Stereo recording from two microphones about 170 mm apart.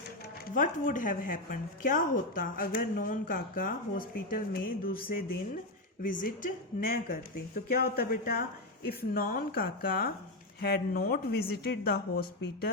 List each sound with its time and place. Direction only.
0.4 s speech: 50° left (ahead or behind); by 12.7 s 70° left (ahead or behind)